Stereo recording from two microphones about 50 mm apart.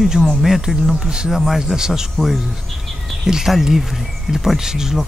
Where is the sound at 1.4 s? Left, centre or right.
Centre.